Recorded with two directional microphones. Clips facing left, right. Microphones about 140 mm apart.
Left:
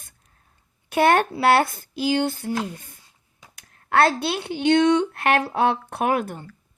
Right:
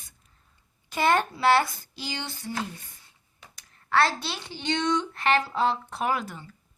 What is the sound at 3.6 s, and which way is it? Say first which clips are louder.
Speech: left 4 dB; 55° left (ahead or behind).